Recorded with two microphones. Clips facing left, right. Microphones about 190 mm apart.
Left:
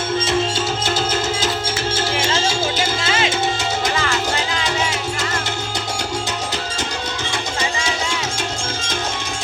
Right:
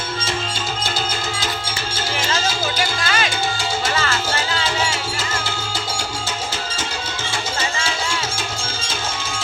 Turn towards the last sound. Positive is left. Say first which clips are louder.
# left 2 dB
turn(degrees=15)  # may be behind; listen again after turning